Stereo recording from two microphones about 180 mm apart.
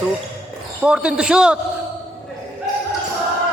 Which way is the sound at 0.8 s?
5° right (ahead or behind).